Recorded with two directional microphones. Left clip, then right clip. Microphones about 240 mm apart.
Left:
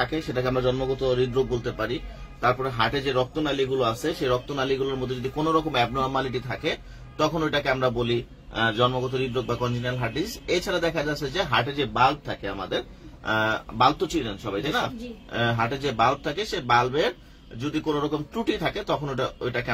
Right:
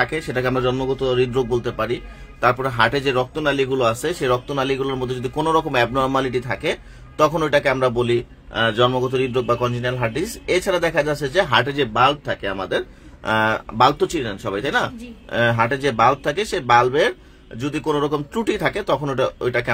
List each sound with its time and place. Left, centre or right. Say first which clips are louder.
0.0 s a man's voice: right 5 dB; right